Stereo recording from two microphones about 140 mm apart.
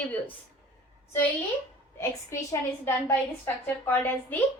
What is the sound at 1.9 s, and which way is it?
A woman's voice, 20° left (ahead or behind).